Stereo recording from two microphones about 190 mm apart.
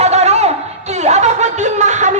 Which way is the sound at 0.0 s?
35° right (ahead or behind).